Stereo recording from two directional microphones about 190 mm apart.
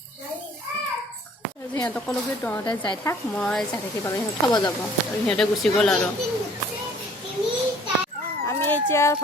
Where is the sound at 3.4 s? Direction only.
5° left (ahead or behind).